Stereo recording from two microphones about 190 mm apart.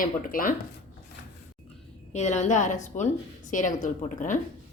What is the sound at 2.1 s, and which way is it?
A woman's voice, 35° left (ahead or behind).